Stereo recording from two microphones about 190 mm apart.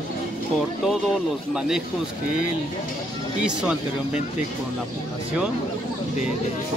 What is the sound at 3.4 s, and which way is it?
Speech, 5° right (ahead or behind).